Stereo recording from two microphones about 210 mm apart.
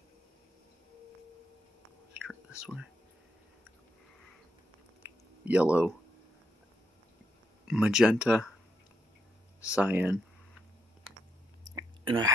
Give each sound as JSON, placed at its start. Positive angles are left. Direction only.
{"t": 2.6, "sound": "speech", "side_deg": -5}
{"t": 5.4, "sound": "speech", "side_deg": -5}
{"t": 7.6, "sound": "speech", "side_deg": -5}
{"t": 9.8, "sound": "speech", "side_deg": -5}
{"t": 11.7, "sound": "a sound", "side_deg": -20}